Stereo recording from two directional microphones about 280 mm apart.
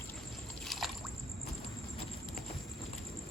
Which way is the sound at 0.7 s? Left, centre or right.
Centre.